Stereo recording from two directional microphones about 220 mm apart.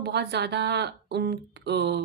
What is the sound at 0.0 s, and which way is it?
Speech, 50° right (ahead or behind).